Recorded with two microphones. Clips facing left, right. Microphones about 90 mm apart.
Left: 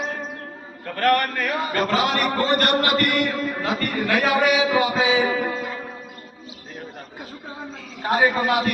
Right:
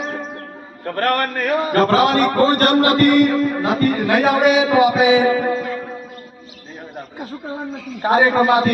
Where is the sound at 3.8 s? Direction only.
25° right (ahead or behind).